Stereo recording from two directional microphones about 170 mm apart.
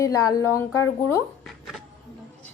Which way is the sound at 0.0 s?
20° left (ahead or behind).